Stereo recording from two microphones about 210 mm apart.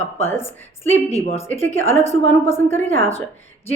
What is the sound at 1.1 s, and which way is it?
Speech, 30° left (ahead or behind).